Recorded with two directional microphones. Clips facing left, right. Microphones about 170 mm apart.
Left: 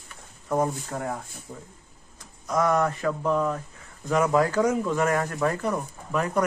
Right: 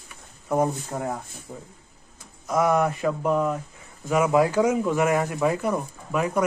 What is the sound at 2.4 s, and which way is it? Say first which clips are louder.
Speech: right 2 dB; 10° right (ahead or behind).